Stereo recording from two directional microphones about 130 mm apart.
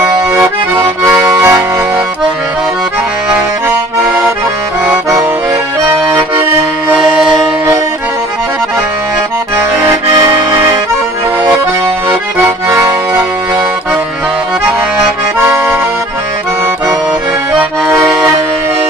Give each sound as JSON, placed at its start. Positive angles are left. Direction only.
{"t": 1.0, "sound": "accordion", "side_deg": -20}
{"t": 5.9, "sound": "accordion", "side_deg": -20}
{"t": 6.9, "sound": "music", "side_deg": -5}
{"t": 12.6, "sound": "accordion", "side_deg": -20}
{"t": 17.6, "sound": "accordion", "side_deg": -20}